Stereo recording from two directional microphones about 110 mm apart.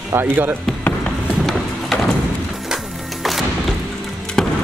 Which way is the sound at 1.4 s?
Centre (ahead or behind).